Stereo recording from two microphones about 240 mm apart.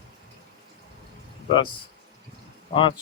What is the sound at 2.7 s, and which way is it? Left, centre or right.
Speech, left.